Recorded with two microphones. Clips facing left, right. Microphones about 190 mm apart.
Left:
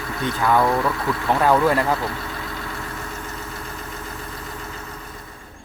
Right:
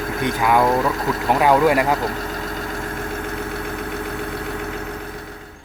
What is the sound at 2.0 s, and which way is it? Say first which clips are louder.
Vehicle: right 4 dB; 45° right (ahead or behind).